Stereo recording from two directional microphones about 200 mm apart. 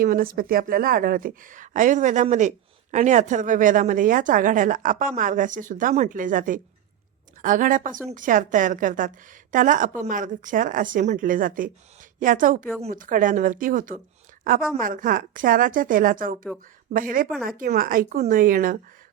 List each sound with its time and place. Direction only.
0.0 s a woman's voice: 45° right (ahead or behind)
17.3 s speech: centre (ahead or behind)
17.6 s a woman's voice: 45° right (ahead or behind)